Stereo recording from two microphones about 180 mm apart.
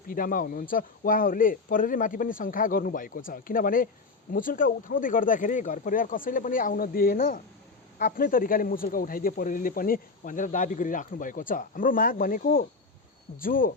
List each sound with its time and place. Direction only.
0.1 s speech: 50° left (ahead or behind)